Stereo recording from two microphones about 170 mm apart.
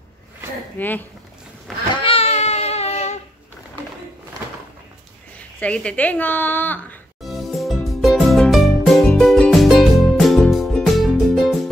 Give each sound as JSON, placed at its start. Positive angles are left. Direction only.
{"t": 0.7, "sound": "a woman's voice", "side_deg": 10}
{"t": 2.0, "sound": "a sound", "side_deg": 35}
{"t": 5.6, "sound": "a woman's voice", "side_deg": 5}
{"t": 7.2, "sound": "music", "side_deg": 0}